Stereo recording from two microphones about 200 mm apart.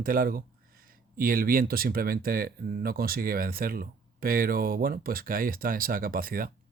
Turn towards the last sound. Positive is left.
turn(degrees=-45)  # may be behind; listen again after turning